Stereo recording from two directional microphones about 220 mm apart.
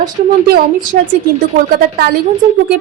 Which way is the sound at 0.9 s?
40° right (ahead or behind).